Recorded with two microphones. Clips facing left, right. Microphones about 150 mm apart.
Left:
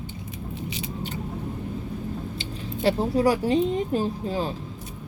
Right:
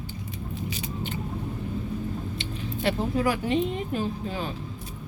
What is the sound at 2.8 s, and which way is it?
Speech, 35° left (ahead or behind).